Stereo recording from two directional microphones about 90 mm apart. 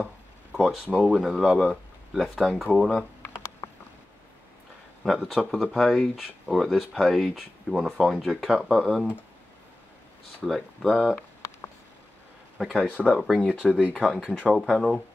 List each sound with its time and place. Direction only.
0.0 s speech: 5° right (ahead or behind)
3.3 s a sound: 30° left (ahead or behind)
5.0 s speech: centre (ahead or behind)
10.4 s speech: centre (ahead or behind)
10.9 s speech: 10° right (ahead or behind)
12.5 s speech: 5° right (ahead or behind)
12.8 s speech: 15° left (ahead or behind)
13.5 s speech: 10° right (ahead or behind)
13.9 s speech: centre (ahead or behind)